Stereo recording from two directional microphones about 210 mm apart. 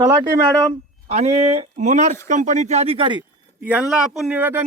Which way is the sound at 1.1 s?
30° right (ahead or behind).